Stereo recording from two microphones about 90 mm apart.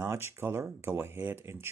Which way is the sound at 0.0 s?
25° right (ahead or behind).